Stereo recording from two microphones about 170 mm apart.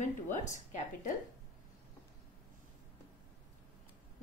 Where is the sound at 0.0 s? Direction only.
45° left (ahead or behind).